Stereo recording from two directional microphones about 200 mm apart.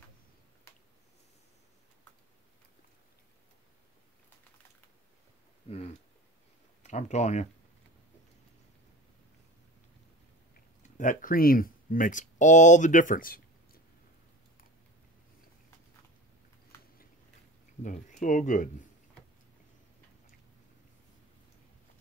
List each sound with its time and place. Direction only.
0.7 s a sound: 15° left (ahead or behind)
5.7 s speech: 30° left (ahead or behind)
10.5 s speech: 40° left (ahead or behind)
17.8 s speech: 40° left (ahead or behind)